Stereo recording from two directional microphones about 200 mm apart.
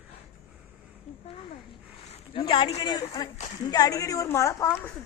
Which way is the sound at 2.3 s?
25° left (ahead or behind).